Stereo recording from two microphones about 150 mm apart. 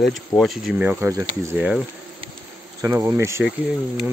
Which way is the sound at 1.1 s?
20° right (ahead or behind).